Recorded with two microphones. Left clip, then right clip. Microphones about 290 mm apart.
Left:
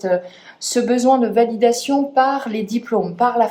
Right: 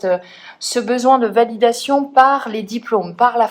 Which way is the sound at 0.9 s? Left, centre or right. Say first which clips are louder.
Right 3 dB; centre.